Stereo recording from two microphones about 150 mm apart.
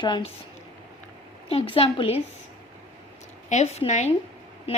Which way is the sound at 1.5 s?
40° left (ahead or behind).